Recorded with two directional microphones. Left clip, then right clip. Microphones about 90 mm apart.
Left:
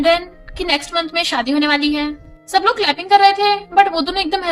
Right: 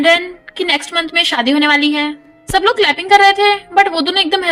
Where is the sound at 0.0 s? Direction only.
40° right (ahead or behind).